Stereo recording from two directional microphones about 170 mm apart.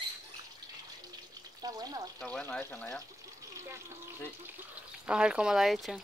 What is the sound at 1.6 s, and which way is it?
Frying, 20° right (ahead or behind).